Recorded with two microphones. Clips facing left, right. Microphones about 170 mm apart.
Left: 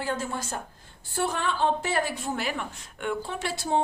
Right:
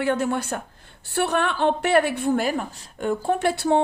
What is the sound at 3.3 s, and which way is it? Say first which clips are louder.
Speech: right 8 dB; 60° right (ahead or behind).